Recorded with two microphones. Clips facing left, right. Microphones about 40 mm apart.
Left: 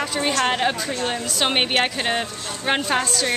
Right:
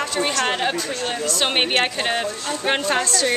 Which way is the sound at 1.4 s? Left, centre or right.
Centre.